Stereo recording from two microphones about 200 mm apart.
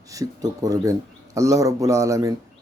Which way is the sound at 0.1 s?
15° right (ahead or behind).